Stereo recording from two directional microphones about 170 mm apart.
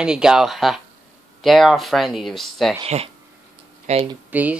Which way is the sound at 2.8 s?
40° right (ahead or behind).